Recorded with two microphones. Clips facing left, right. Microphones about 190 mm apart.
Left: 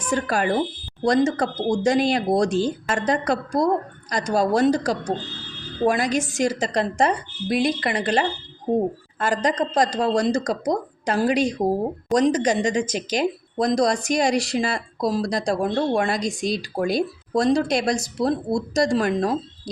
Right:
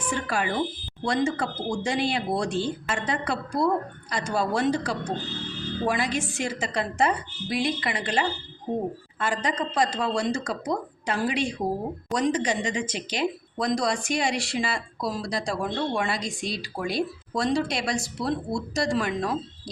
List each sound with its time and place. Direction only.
0.1 s a woman's voice: 40° left (ahead or behind)